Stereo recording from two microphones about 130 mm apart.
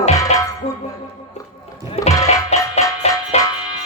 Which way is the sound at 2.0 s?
55° left (ahead or behind).